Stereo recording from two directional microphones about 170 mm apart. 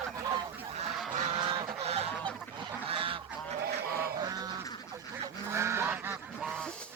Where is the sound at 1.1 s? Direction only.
40° right (ahead or behind).